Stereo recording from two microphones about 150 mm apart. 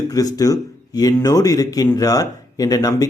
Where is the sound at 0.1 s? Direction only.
25° left (ahead or behind).